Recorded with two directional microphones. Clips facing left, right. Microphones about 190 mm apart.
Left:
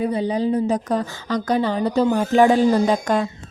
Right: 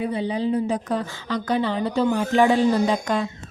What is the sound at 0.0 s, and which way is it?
A woman's voice, 40° left (ahead or behind).